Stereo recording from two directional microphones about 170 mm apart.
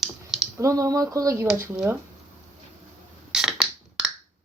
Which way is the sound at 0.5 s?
20° right (ahead or behind).